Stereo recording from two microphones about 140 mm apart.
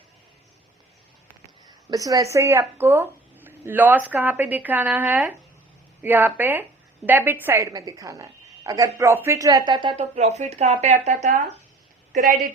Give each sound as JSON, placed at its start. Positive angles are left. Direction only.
{"t": 1.9, "sound": "a woman's voice", "side_deg": -25}
{"t": 7.7, "sound": "speech", "side_deg": -30}
{"t": 10.0, "sound": "speech", "side_deg": -50}